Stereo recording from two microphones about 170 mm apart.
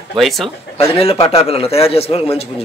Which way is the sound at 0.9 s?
35° left (ahead or behind).